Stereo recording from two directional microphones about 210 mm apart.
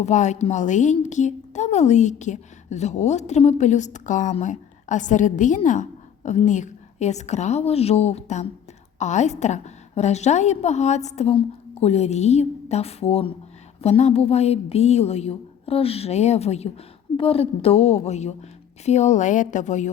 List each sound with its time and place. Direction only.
0.0 s a woman's voice: 35° left (ahead or behind)